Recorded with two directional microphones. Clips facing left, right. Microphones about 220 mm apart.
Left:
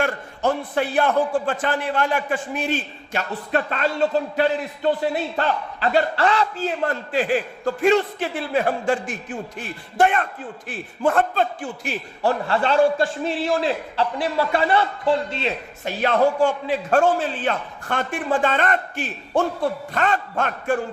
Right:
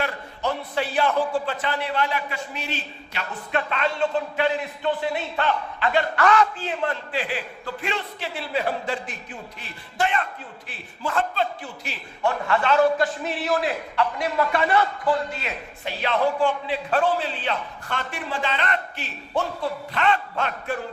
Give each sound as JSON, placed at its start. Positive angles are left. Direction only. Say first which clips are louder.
{"t": 0.0, "sound": "a man's voice", "louder": "left 5 dB", "side_deg": 50}
{"t": 12.2, "sound": "a man's voice", "louder": "left 2 dB", "side_deg": 35}
{"t": 15.8, "sound": "a man's voice", "louder": "left 5 dB", "side_deg": 45}